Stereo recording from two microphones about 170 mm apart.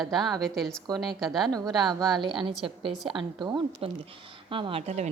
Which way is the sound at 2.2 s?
30° right (ahead or behind).